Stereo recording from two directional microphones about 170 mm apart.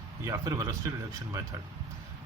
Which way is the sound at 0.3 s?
20° right (ahead or behind).